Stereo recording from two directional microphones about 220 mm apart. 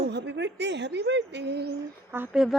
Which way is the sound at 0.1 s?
50° right (ahead or behind).